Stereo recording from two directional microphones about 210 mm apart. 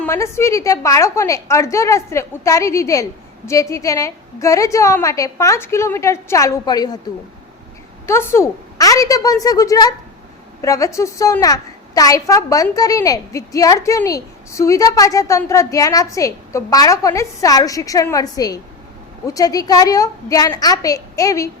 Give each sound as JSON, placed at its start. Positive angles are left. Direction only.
{"t": 0.0, "sound": "a woman's voice", "side_deg": 15}
{"t": 8.0, "sound": "a woman's voice", "side_deg": 10}